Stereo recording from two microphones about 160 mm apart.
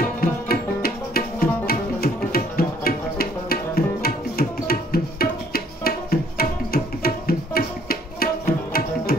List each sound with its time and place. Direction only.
0.2 s tabla: 70° left (ahead or behind)